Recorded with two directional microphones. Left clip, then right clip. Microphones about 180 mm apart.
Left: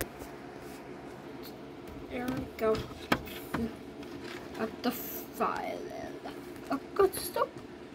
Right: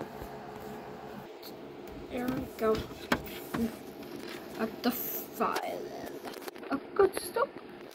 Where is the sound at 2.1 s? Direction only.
Centre (ahead or behind).